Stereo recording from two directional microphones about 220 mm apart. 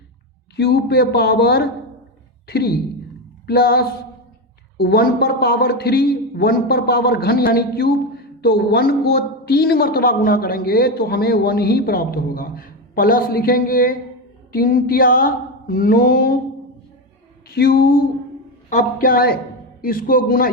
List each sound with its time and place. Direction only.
0.5 s a man's voice: 45° left (ahead or behind)
14.5 s mantra: 40° left (ahead or behind)
17.5 s mantra: 45° left (ahead or behind)